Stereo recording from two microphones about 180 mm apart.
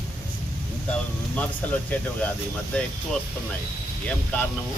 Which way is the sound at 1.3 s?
10° left (ahead or behind).